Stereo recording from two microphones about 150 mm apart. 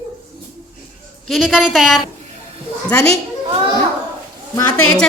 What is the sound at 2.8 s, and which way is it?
Speech, 10° left (ahead or behind).